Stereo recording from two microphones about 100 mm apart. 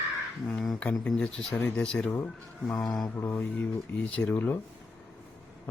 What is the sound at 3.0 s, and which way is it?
Mantra, 35° left (ahead or behind).